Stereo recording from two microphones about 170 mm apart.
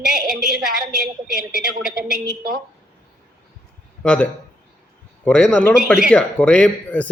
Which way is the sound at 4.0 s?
5° left (ahead or behind).